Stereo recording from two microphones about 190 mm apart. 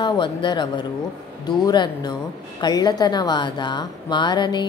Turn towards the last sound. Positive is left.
turn(degrees=25)  # may be behind; listen again after turning